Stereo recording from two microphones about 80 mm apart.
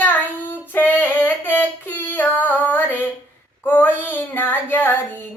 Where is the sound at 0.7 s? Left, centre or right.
Left.